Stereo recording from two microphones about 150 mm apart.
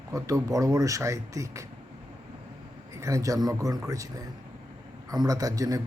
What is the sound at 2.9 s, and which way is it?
A man's voice, 20° right (ahead or behind).